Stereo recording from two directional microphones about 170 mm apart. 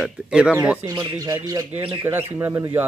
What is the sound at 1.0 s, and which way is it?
Speech, 20° right (ahead or behind).